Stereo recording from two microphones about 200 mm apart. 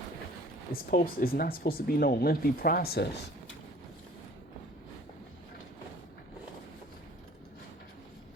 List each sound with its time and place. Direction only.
0.7 s speech: 45° left (ahead or behind)